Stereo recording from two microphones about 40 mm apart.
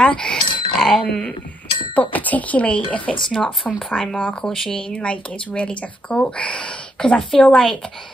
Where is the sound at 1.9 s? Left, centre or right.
Left.